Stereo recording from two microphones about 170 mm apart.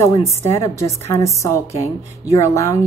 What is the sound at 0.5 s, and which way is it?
A woman's voice, 15° left (ahead or behind).